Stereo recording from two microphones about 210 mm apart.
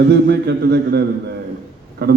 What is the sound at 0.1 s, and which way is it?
A man's voice, 55° right (ahead or behind).